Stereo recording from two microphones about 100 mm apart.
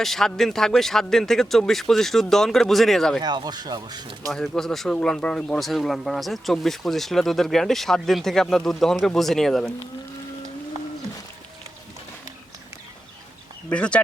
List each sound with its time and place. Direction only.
0.0 s speech: 5° left (ahead or behind)
3.2 s speech: 45° right (ahead or behind)
4.3 s speech: centre (ahead or behind)
13.7 s speech: 10° left (ahead or behind)